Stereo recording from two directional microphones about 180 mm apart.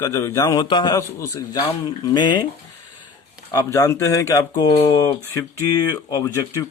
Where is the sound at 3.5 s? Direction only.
20° left (ahead or behind).